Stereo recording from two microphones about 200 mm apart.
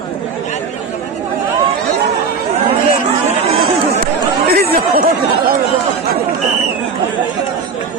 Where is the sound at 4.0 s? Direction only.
50° right (ahead or behind).